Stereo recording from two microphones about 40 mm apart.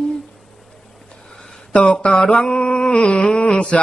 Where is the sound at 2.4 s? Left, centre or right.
Left.